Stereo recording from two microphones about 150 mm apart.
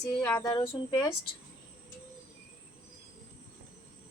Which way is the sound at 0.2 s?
10° left (ahead or behind).